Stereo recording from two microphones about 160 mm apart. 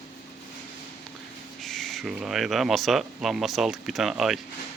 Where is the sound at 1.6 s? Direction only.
Centre (ahead or behind).